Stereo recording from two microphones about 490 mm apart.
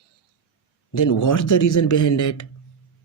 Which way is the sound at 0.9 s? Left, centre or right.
Left.